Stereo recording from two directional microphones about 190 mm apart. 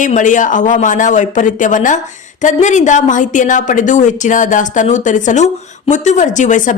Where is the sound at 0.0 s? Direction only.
40° left (ahead or behind).